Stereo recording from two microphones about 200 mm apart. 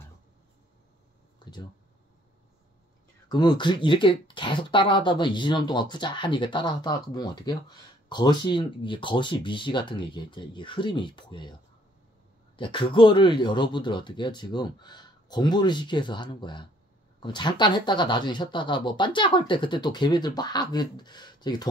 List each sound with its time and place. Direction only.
1.4 s a sound: 20° left (ahead or behind)
3.3 s speech: 20° left (ahead or behind)
12.5 s speech: 25° left (ahead or behind)